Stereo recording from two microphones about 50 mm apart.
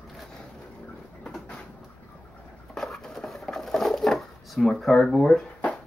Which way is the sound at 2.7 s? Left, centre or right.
Centre.